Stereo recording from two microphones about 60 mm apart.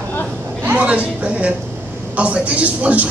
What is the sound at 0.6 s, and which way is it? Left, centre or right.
A woman's voice, right.